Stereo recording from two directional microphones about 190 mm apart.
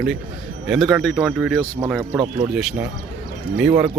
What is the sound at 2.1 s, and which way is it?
Speech, 20° right (ahead or behind).